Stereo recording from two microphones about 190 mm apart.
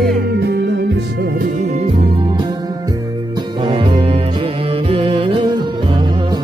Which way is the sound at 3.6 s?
25° right (ahead or behind).